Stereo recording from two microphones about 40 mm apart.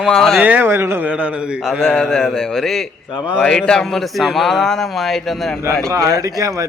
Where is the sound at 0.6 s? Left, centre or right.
Right.